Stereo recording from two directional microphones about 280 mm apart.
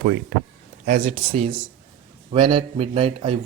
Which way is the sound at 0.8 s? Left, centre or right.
Right.